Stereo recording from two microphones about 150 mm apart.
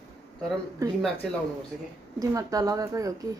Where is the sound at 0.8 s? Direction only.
20° right (ahead or behind).